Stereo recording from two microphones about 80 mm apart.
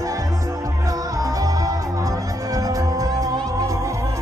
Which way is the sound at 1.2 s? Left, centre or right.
Right.